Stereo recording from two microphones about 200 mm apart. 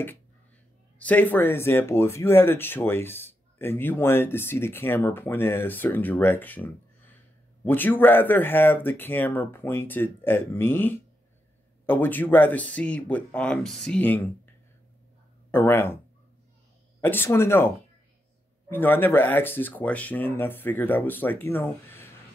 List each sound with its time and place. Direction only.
0.9 s speech: 10° left (ahead or behind)
15.5 s speech: 10° left (ahead or behind)
17.0 s speech: 10° left (ahead or behind)